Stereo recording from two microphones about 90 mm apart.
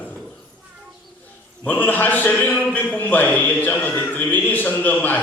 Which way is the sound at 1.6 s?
20° left (ahead or behind).